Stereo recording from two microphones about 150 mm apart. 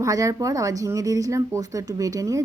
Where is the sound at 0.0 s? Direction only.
20° right (ahead or behind).